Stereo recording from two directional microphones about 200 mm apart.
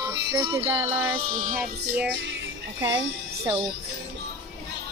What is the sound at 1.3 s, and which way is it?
Child singing, 40° right (ahead or behind).